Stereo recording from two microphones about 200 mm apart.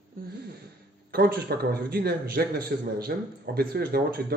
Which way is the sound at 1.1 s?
50° right (ahead or behind).